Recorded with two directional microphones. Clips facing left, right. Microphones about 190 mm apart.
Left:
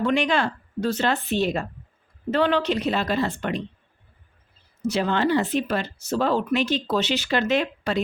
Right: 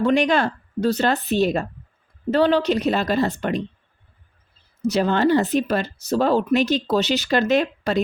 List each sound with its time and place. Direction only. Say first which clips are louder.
0.0 s speech: right 4 dB; 40° right (ahead or behind)
4.9 s speech: right 4 dB; 40° right (ahead or behind)